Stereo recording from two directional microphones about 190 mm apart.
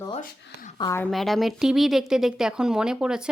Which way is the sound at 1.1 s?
Centre (ahead or behind).